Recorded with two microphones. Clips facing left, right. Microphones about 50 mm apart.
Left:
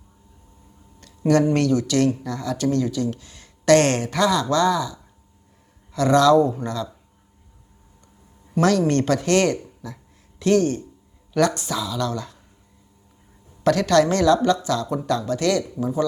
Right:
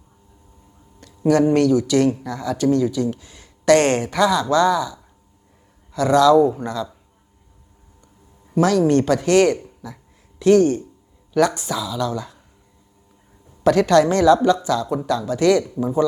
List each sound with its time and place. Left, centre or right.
1.5 s speech: centre
8.5 s speech: centre
13.7 s speech: centre